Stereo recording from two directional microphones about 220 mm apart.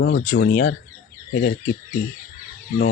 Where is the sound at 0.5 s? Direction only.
40° left (ahead or behind).